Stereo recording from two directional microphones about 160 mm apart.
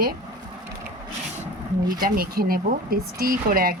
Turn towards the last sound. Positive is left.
turn(degrees=-65)  # may be behind; listen again after turning